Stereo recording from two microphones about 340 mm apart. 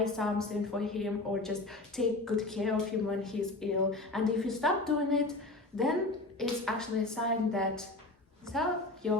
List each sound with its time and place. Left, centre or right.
0.0 s a woman's voice: centre